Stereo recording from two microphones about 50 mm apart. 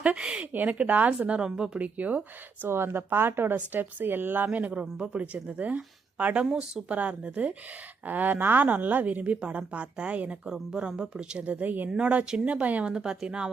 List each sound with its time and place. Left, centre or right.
0.0 s a woman's voice: right
1.4 s speech: centre
2.0 s a woman's voice: right
2.6 s a woman's voice: right
4.4 s speech: right
6.4 s a woman's voice: centre
10.4 s speech: centre
11.4 s a woman's voice: right
11.9 s speech: centre
12.9 s speech: centre